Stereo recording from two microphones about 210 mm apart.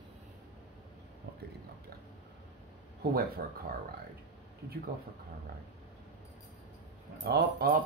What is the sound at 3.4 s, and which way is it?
Speech, 45° right (ahead or behind).